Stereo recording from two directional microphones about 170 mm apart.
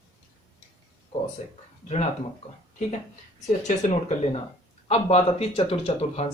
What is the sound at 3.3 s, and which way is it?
Speech, 45° left (ahead or behind).